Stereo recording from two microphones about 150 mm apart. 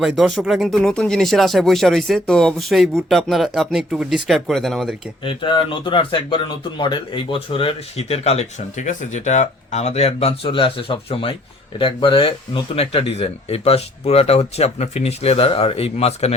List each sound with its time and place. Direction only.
0.0 s speech: centre (ahead or behind)
5.2 s speech: 35° left (ahead or behind)